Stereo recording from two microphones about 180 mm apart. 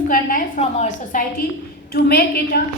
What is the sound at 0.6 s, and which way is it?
Speech, 40° left (ahead or behind).